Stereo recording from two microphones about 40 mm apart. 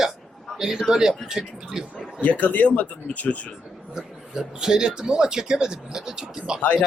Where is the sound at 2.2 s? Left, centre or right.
Left.